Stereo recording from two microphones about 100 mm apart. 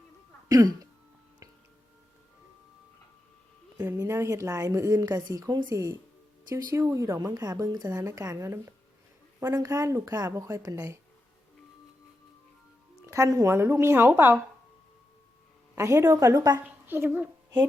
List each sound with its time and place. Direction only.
0.4 s speech: 40° right (ahead or behind)
3.8 s a woman's voice: 30° right (ahead or behind)
13.1 s a woman's voice: 35° right (ahead or behind); by 14.3 s 20° right (ahead or behind)
15.8 s a woman's voice: 30° right (ahead or behind)
16.8 s a woman's voice: 20° right (ahead or behind)